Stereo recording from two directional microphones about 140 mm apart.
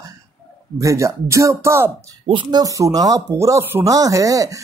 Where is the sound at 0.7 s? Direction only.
20° right (ahead or behind).